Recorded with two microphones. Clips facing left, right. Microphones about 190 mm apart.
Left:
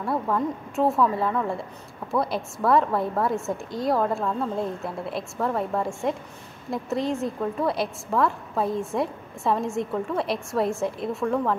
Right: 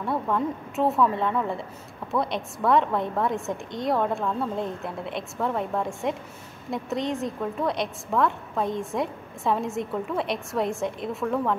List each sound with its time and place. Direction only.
0.0 s a woman's voice: centre (ahead or behind)